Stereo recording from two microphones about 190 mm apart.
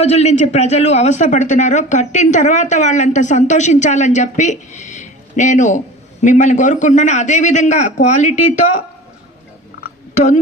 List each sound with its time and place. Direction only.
0.0 s speech: 35° left (ahead or behind)
10.2 s speech: 40° left (ahead or behind)